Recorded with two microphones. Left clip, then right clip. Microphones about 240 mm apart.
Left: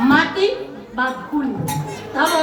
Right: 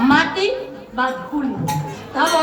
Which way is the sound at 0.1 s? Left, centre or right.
Right.